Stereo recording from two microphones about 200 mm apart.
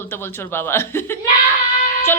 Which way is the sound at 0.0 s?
10° left (ahead or behind).